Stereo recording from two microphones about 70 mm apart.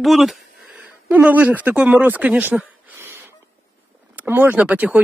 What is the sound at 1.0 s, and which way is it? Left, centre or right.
Speech, right.